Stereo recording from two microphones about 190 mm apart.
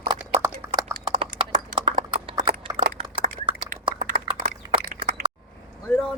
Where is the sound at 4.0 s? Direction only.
45° right (ahead or behind).